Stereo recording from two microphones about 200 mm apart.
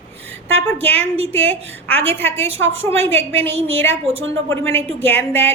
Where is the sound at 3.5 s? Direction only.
30° right (ahead or behind).